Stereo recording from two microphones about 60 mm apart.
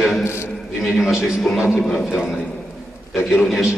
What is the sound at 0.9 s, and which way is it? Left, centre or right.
A man's voice, centre.